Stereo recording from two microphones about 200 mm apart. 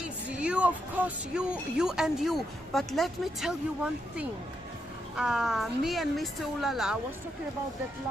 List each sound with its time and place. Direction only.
0.4 s speech: 5° right (ahead or behind)
5.1 s speech: 5° right (ahead or behind)